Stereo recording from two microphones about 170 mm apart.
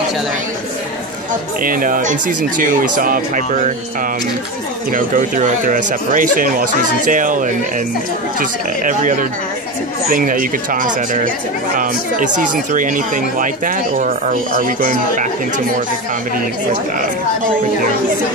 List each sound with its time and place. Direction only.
1.6 s speech: 55° right (ahead or behind)
4.9 s speech: 50° right (ahead or behind)